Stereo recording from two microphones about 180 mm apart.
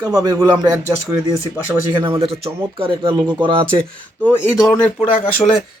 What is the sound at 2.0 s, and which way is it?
Speech, 30° right (ahead or behind).